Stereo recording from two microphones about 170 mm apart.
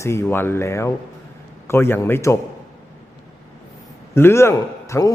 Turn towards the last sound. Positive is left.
turn(degrees=15)  # may be behind; listen again after turning